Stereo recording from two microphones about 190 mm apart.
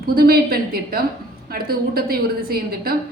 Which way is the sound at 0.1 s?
55° right (ahead or behind).